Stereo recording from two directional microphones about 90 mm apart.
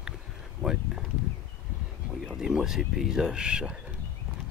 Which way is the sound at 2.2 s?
5° right (ahead or behind).